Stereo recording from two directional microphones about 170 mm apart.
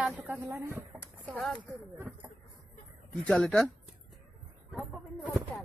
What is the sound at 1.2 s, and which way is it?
Speech, 5° left (ahead or behind).